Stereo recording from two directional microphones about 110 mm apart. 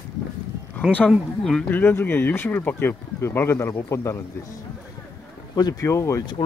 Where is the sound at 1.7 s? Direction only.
20° left (ahead or behind).